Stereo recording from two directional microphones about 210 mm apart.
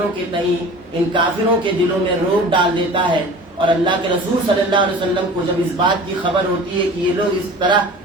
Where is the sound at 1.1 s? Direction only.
25° right (ahead or behind).